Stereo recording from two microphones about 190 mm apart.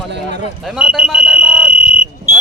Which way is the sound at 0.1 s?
65° right (ahead or behind).